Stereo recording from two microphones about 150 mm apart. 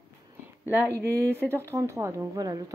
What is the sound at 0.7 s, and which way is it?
Speech, 15° right (ahead or behind).